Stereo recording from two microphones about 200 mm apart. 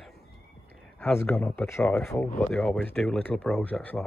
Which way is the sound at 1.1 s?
10° left (ahead or behind).